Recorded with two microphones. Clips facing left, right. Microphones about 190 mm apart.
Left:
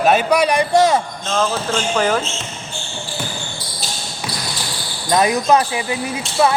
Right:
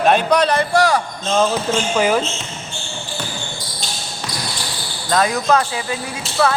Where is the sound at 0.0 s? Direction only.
5° left (ahead or behind); by 1.0 s 20° left (ahead or behind).